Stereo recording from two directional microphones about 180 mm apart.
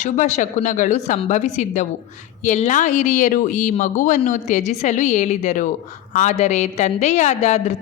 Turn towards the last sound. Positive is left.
turn(degrees=40)  # may be behind; listen again after turning